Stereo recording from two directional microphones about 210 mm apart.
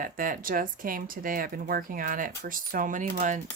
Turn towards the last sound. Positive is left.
turn(degrees=-35)  # may be behind; listen again after turning